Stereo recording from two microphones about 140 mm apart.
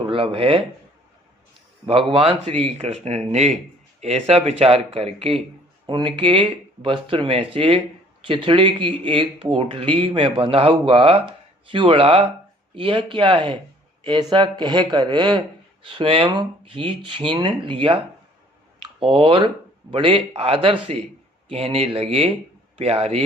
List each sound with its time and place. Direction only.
0.0 s speech: 35° right (ahead or behind)
1.9 s speech: 40° right (ahead or behind)
5.8 s speech: 35° right (ahead or behind)